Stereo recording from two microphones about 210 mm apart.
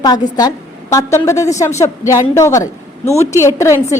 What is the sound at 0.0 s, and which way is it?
A woman's voice, 20° left (ahead or behind).